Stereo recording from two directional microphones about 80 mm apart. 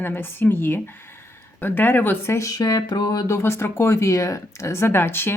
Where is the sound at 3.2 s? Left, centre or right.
Left.